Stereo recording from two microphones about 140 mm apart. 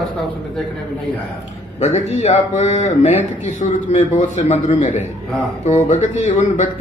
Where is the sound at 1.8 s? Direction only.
55° left (ahead or behind).